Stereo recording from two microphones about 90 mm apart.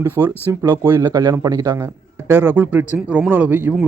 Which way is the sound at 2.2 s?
25° right (ahead or behind).